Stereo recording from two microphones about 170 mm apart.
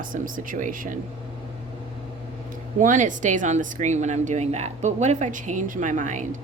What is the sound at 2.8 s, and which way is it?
A woman's voice, 50° right (ahead or behind).